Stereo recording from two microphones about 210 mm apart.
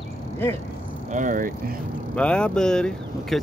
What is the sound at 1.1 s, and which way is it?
Speech, 40° right (ahead or behind).